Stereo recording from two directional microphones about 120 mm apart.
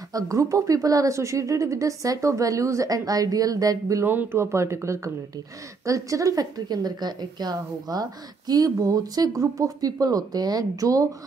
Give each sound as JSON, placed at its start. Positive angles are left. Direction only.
{"t": 0.1, "sound": "a woman's voice", "side_deg": -25}
{"t": 4.1, "sound": "a woman's voice", "side_deg": -20}